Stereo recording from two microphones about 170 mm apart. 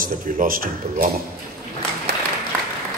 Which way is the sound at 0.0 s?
55° right (ahead or behind).